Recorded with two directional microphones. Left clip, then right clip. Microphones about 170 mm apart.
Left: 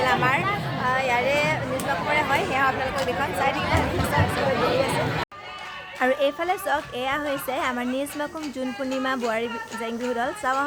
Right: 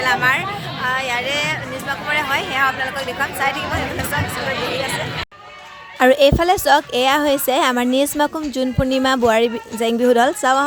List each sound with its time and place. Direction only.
0.0 s a woman's voice: centre (ahead or behind)
6.0 s a woman's voice: 70° right (ahead or behind)